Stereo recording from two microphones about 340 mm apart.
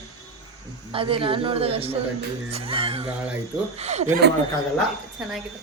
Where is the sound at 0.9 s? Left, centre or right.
Centre.